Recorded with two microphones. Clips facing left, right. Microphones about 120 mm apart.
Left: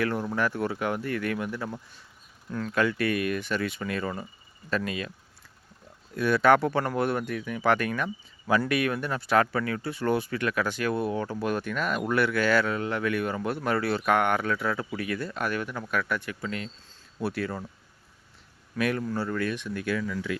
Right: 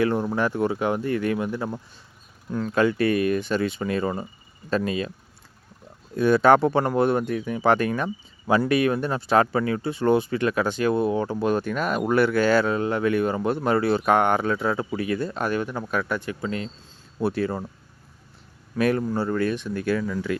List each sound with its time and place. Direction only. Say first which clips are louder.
0.0 s speech: right 5 dB; 25° right (ahead or behind)
6.1 s speech: right 4 dB; 25° right (ahead or behind)
18.8 s speech: right 5 dB; 35° right (ahead or behind)